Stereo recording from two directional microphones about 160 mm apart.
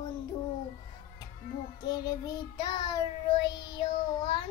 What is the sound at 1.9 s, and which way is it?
Child singing, 25° left (ahead or behind).